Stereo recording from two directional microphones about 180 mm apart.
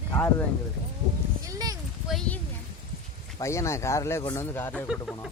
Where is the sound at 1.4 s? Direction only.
20° right (ahead or behind).